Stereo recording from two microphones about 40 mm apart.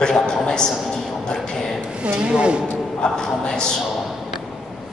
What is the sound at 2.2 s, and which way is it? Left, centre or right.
Speech, right.